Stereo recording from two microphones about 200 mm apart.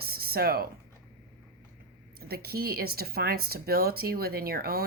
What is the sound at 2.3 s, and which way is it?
Speech, 50° right (ahead or behind).